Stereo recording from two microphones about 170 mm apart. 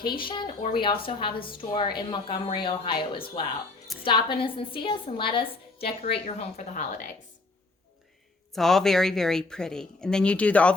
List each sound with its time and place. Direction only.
0.0 s a woman's voice: 30° left (ahead or behind)
8.5 s speech: centre (ahead or behind)